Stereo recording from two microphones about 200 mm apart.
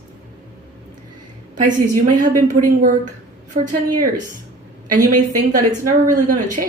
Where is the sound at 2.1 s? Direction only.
40° right (ahead or behind).